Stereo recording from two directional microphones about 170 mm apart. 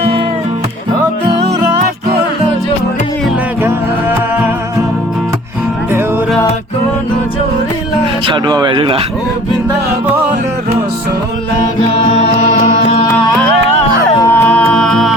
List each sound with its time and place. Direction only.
8.3 s speech: 25° right (ahead or behind)
12.0 s music: 40° left (ahead or behind)
14.2 s music: 15° left (ahead or behind)